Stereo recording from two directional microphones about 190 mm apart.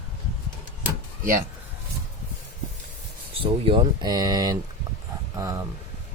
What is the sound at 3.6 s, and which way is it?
Speech, 25° right (ahead or behind).